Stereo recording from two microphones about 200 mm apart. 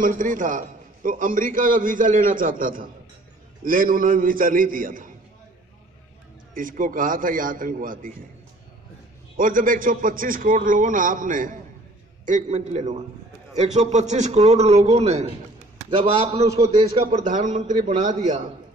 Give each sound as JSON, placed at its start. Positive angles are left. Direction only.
{"t": 0.0, "sound": "a man's voice", "side_deg": -40}
{"t": 6.5, "sound": "a man's voice", "side_deg": -40}
{"t": 9.4, "sound": "a man's voice", "side_deg": -40}